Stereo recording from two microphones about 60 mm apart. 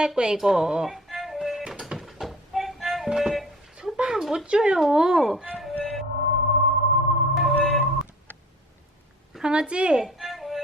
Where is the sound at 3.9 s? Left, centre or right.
Centre.